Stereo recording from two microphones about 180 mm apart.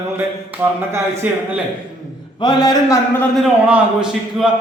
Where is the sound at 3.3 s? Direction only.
Centre (ahead or behind).